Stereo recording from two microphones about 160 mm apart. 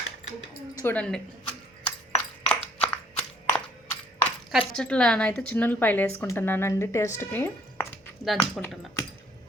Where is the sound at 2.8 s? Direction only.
10° left (ahead or behind).